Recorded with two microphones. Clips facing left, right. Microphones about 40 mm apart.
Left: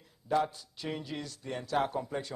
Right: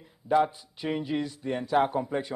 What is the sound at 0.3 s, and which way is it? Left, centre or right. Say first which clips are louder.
A man's voice: right 6 dB; right.